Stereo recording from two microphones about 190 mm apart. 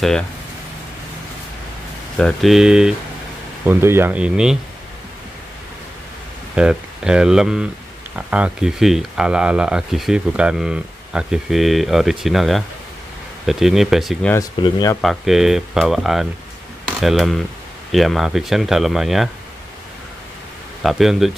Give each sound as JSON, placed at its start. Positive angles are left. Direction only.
{"t": 2.1, "sound": "speech", "side_deg": 0}
{"t": 6.5, "sound": "speech", "side_deg": -5}
{"t": 14.3, "sound": "speech", "side_deg": 20}
{"t": 15.0, "sound": "speech", "side_deg": 0}
{"t": 20.8, "sound": "speech", "side_deg": 0}